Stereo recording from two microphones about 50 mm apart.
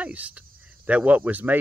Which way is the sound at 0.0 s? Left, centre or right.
Right.